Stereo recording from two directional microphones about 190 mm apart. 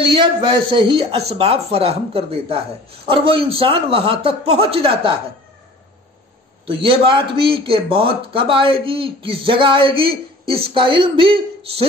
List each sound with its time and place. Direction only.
0.0 s a man's voice: 25° right (ahead or behind)
6.6 s a man's voice: 25° right (ahead or behind)